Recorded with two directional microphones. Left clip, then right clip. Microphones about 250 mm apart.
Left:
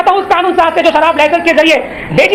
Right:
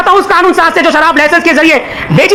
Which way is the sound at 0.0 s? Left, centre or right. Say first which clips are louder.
Right 3 dB; right.